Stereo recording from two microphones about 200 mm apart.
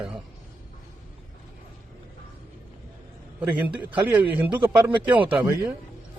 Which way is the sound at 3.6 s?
10° right (ahead or behind).